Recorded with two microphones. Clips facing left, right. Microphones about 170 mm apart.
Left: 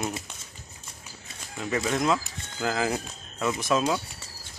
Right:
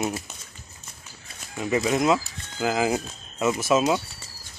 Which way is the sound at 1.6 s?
10° right (ahead or behind).